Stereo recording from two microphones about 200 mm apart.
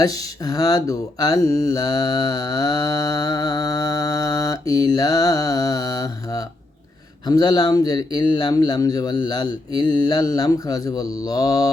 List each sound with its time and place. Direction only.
0.0 s a man's voice: 20° left (ahead or behind)